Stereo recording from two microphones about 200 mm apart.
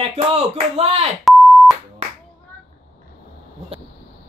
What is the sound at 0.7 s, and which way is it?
Speech, 30° right (ahead or behind).